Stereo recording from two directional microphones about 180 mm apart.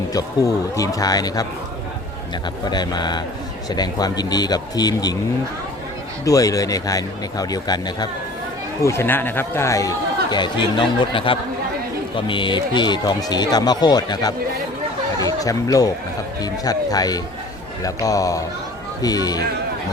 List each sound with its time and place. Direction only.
0.1 s speech: 20° left (ahead or behind)
2.6 s speech: 25° left (ahead or behind)
6.2 s speech: 20° left (ahead or behind)